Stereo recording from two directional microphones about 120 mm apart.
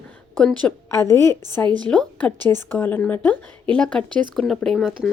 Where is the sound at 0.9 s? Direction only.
25° left (ahead or behind).